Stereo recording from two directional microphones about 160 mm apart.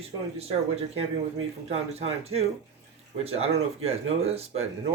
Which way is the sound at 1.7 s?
40° right (ahead or behind).